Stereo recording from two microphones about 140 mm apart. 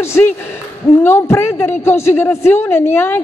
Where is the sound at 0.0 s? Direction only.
20° left (ahead or behind).